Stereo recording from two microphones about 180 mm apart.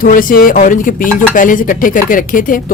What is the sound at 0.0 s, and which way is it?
Speech, 50° left (ahead or behind).